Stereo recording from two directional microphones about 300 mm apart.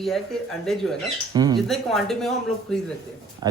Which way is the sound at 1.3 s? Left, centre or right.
Centre.